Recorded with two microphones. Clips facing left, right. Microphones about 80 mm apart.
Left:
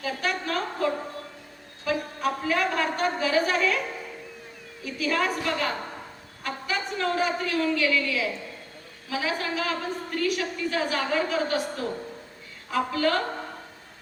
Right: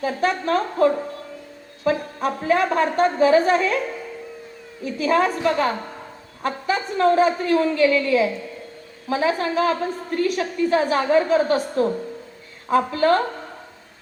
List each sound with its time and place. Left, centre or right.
0.0 s a woman's voice: right
4.9 s a woman's voice: right